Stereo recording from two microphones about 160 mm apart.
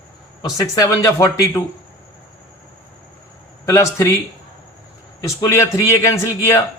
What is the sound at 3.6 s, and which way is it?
Speech, 20° left (ahead or behind).